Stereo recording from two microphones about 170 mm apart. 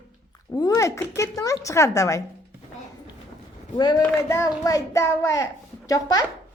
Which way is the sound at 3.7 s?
25° left (ahead or behind).